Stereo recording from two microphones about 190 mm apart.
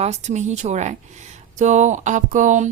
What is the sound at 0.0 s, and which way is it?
A woman's voice, 35° right (ahead or behind).